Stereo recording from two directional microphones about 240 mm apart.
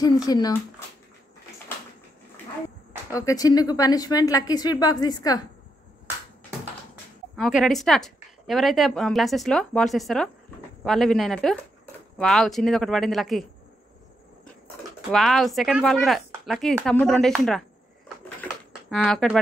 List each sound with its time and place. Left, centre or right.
0.0 s a woman's voice: centre
3.2 s a woman's voice: centre
7.3 s a woman's voice: centre
15.0 s a woman's voice: centre
18.7 s speech: centre